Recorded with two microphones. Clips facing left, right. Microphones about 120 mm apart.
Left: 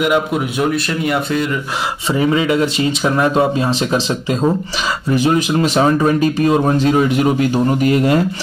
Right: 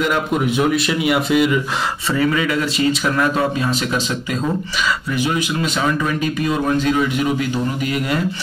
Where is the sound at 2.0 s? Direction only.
25° left (ahead or behind).